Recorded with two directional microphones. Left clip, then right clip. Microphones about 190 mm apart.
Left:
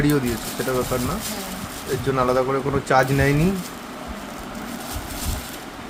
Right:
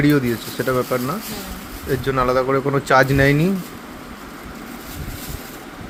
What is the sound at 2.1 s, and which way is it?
Speech, 15° right (ahead or behind).